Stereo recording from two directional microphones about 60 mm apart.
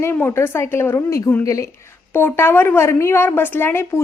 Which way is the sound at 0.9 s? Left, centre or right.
Left.